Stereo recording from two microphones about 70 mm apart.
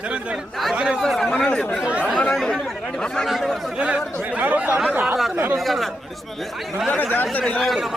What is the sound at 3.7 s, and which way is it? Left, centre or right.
Speech, centre.